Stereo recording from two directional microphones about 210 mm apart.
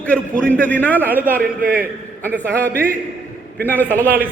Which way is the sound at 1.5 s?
40° right (ahead or behind).